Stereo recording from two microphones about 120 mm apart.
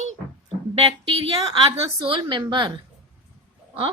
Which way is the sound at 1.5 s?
45° right (ahead or behind).